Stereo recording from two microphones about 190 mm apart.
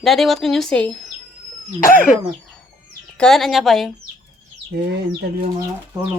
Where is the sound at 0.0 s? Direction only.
Centre (ahead or behind).